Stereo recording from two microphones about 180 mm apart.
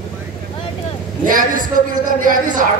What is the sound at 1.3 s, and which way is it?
Speech, 50° right (ahead or behind).